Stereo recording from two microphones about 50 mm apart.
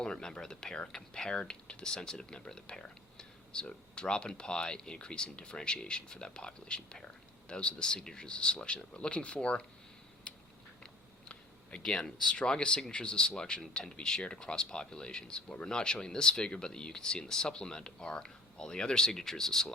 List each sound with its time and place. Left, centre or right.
0.0 s speech: centre
11.8 s speech: centre